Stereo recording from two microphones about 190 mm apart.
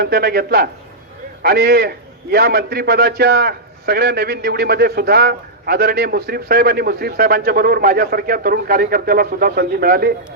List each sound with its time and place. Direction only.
0.0 s a man's voice: 55° right (ahead or behind)